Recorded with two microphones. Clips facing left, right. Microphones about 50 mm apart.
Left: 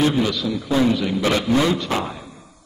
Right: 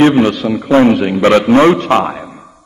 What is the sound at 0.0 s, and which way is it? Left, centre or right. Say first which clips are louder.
A man's voice: right 10 dB; right.